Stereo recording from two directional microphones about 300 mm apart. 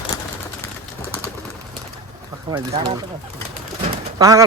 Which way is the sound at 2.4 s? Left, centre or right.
Centre.